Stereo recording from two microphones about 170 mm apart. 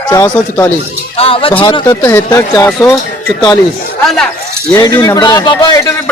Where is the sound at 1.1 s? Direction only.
35° left (ahead or behind); by 2.9 s 15° left (ahead or behind).